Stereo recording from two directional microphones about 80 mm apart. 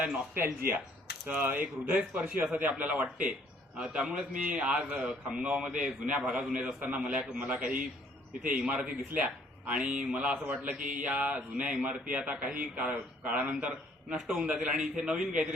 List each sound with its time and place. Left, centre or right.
1.3 s speech: right